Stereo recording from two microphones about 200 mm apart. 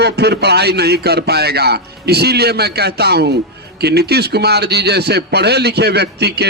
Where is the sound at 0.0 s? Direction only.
55° right (ahead or behind).